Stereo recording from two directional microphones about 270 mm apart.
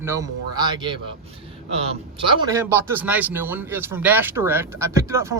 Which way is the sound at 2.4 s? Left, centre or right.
Centre.